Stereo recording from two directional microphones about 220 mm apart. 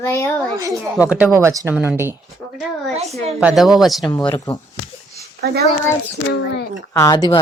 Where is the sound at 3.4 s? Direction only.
Centre (ahead or behind).